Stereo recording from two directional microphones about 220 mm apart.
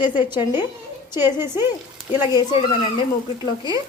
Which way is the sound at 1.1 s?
10° right (ahead or behind).